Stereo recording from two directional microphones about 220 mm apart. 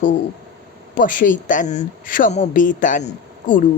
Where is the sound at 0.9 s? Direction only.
35° left (ahead or behind).